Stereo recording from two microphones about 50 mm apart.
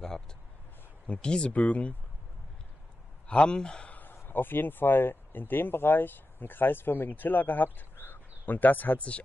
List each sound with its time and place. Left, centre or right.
1.0 s speech: left
1.6 s speech: left
3.3 s speech: left
3.9 s a sound: left
4.2 s speech: left